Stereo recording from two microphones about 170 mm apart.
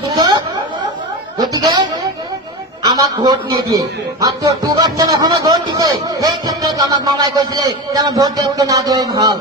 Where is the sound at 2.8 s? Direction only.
20° right (ahead or behind).